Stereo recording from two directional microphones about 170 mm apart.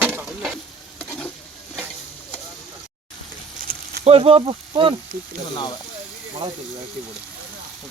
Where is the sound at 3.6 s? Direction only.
50° right (ahead or behind).